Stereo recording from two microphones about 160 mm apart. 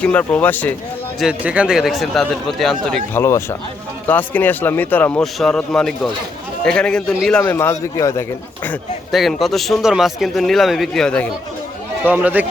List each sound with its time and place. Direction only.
0.0 s speech: 10° left (ahead or behind)
1.2 s speech: 5° right (ahead or behind)
3.2 s speech: 20° left (ahead or behind)
9.1 s speech: centre (ahead or behind)
12.0 s speech: 10° right (ahead or behind)